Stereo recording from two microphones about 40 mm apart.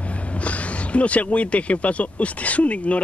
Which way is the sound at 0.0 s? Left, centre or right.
Left.